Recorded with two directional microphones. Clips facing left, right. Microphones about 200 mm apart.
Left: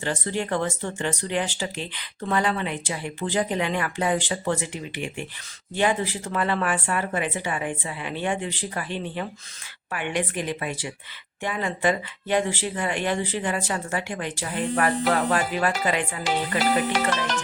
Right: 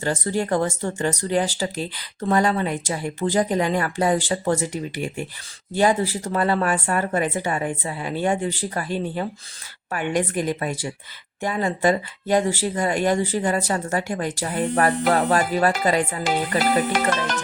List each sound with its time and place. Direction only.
0.0 s a woman's voice: 40° right (ahead or behind)